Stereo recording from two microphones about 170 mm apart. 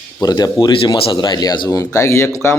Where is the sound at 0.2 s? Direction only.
20° left (ahead or behind).